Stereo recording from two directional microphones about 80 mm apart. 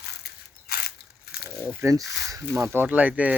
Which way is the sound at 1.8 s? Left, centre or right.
Right.